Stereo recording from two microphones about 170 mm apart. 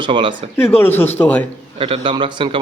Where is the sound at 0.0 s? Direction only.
30° right (ahead or behind).